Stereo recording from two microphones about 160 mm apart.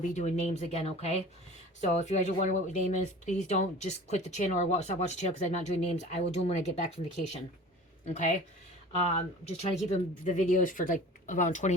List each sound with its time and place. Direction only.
0.0 s speech: 50° left (ahead or behind)
8.0 s speech: 50° left (ahead or behind)
9.6 s speech: 50° left (ahead or behind)